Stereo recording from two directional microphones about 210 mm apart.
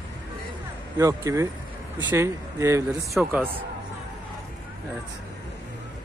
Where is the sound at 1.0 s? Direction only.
15° right (ahead or behind).